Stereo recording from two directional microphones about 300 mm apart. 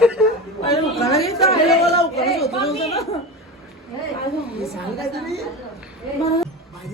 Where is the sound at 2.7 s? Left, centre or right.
Centre.